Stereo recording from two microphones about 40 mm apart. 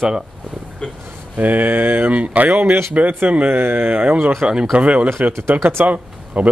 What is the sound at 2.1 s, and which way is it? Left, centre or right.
Speech, right.